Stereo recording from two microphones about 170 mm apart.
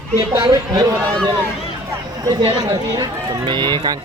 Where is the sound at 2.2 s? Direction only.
20° right (ahead or behind).